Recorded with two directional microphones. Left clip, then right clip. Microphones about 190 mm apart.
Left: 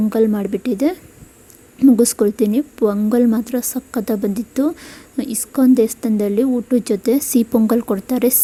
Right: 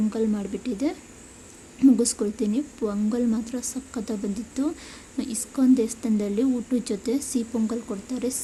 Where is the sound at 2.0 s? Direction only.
40° left (ahead or behind).